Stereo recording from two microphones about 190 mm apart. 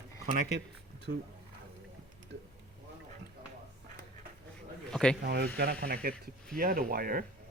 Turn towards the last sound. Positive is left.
turn(degrees=-50)  # may be behind; listen again after turning